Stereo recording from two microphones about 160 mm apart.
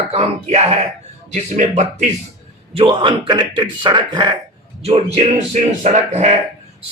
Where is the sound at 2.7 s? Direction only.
30° right (ahead or behind).